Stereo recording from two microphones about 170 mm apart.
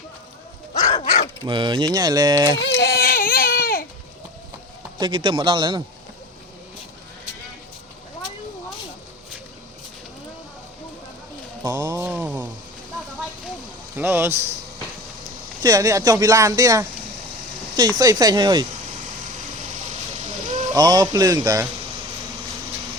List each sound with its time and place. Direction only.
0.7 s dog: 45° left (ahead or behind)
1.5 s speech: 30° right (ahead or behind)
2.6 s baby cry: 85° left; by 3.8 s 60° left (ahead or behind)
4.9 s speech: 30° right (ahead or behind)
11.6 s music: 20° right (ahead or behind)
13.9 s music: 10° right (ahead or behind)
15.6 s speech: 20° right (ahead or behind)
20.7 s speech: 20° right (ahead or behind)